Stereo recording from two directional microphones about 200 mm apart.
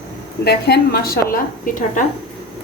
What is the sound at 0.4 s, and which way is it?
Speech, 50° left (ahead or behind).